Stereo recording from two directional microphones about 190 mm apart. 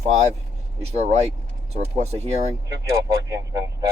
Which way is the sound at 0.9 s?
35° right (ahead or behind).